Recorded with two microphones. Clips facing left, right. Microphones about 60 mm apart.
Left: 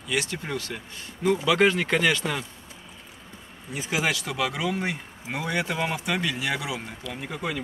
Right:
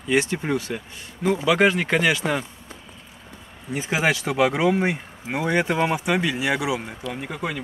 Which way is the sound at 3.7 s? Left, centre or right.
Right.